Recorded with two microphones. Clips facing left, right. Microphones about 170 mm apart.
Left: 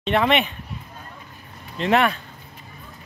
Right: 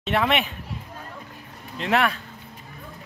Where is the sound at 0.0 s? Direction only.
5° right (ahead or behind).